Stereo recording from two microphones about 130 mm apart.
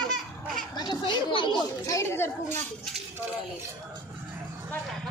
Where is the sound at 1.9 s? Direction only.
20° left (ahead or behind).